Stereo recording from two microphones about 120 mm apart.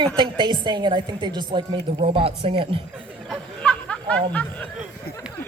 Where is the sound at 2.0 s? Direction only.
55° right (ahead or behind).